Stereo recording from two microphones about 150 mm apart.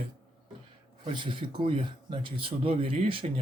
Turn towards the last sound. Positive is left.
turn(degrees=-35)  # may be behind; listen again after turning